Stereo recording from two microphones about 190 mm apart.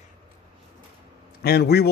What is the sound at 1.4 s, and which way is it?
Speech, 55° left (ahead or behind).